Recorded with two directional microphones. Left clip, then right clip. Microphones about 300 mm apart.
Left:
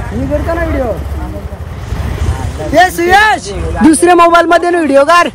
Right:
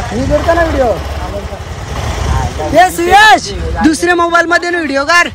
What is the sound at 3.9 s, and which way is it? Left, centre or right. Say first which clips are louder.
Speech: left 5 dB; centre.